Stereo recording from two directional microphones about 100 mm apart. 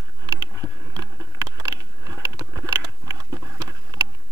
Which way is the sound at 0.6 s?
35° right (ahead or behind).